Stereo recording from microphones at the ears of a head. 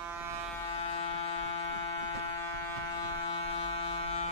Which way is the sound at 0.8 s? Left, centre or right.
Left.